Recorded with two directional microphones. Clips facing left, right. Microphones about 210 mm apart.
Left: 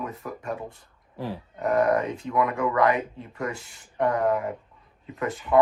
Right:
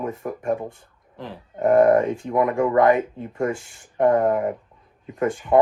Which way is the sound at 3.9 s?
25° right (ahead or behind).